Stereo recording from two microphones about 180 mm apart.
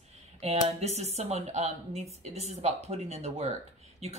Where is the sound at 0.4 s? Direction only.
35° right (ahead or behind).